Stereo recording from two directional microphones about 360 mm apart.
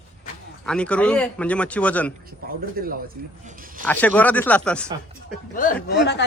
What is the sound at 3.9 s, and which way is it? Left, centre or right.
A man's voice, centre.